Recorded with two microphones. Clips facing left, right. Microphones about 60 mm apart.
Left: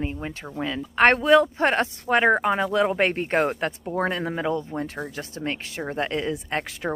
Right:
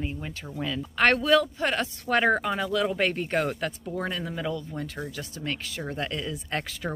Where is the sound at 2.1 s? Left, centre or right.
Left.